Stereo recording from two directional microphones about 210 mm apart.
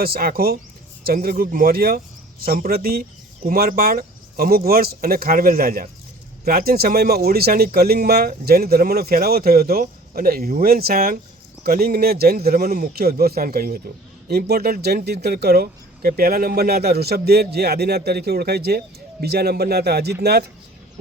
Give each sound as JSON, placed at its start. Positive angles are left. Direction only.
{"t": 0.0, "sound": "speech", "side_deg": -45}